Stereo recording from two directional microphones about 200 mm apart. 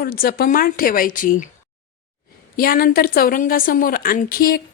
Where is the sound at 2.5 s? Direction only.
45° left (ahead or behind).